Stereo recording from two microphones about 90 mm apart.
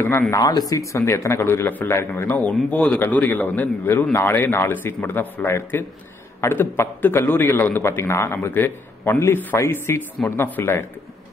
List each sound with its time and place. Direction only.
0.3 s a man's voice: 45° left (ahead or behind); by 10.9 s 30° left (ahead or behind)